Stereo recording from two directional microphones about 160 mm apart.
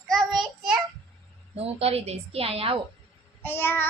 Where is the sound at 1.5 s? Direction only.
40° right (ahead or behind).